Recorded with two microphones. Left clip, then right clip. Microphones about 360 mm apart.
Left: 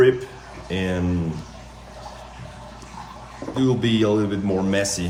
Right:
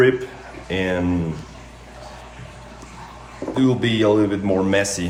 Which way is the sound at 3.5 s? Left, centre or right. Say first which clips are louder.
Right 2 dB; centre.